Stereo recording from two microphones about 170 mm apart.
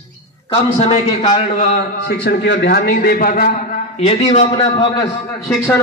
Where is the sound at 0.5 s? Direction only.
35° left (ahead or behind).